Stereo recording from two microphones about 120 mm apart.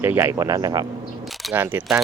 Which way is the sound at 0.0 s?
20° right (ahead or behind).